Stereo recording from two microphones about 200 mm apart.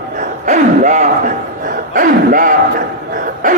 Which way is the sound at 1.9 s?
45° right (ahead or behind).